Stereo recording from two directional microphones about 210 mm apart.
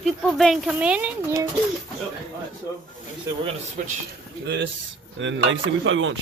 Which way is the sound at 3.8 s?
40° right (ahead or behind).